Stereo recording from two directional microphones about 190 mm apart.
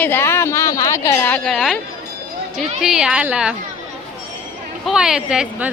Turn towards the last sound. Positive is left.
turn(degrees=-5)  # may be behind; listen again after turning